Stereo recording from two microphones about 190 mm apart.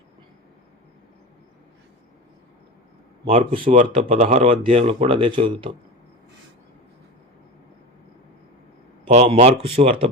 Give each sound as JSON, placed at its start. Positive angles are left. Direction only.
{"t": 3.2, "sound": "speech", "side_deg": -30}
{"t": 9.0, "sound": "speech", "side_deg": -35}